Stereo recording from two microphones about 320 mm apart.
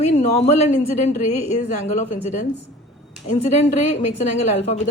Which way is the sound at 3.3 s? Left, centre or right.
Left.